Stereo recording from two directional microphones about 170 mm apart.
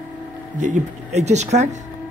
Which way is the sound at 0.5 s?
45° right (ahead or behind).